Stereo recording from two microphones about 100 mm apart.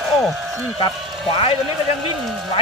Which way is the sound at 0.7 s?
65° left (ahead or behind).